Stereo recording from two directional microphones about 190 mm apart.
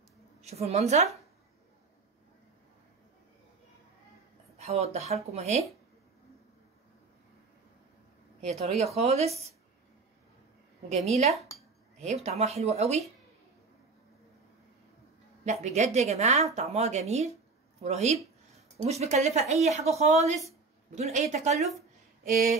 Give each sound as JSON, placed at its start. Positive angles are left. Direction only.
{"t": 0.5, "sound": "speech", "side_deg": -35}
{"t": 4.6, "sound": "speech", "side_deg": -35}
{"t": 8.5, "sound": "speech", "side_deg": -35}
{"t": 11.1, "sound": "speech", "side_deg": -35}
{"t": 15.4, "sound": "speech", "side_deg": -40}